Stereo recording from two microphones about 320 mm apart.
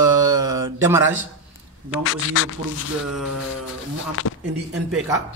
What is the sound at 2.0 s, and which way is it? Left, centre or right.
Speech, left.